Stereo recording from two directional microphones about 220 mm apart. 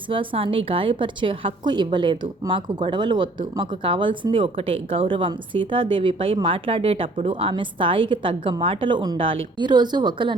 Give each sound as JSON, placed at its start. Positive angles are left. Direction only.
{"t": 0.1, "sound": "speech", "side_deg": -25}